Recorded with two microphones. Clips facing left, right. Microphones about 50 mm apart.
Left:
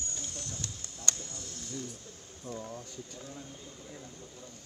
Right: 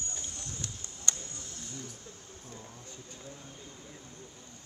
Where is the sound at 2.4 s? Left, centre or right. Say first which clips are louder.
Left 11 dB; left.